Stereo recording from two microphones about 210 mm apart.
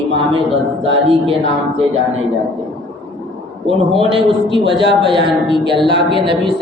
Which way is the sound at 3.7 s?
25° right (ahead or behind).